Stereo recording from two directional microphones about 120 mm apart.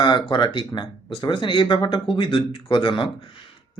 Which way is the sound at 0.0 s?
40° left (ahead or behind).